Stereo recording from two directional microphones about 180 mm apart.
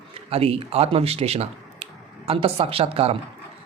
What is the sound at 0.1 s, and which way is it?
Speech, 35° right (ahead or behind).